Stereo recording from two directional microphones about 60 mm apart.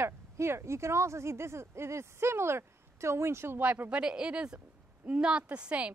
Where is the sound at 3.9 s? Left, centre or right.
Centre.